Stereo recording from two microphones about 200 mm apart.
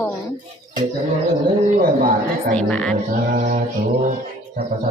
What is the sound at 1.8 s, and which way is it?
Speech, 45° right (ahead or behind).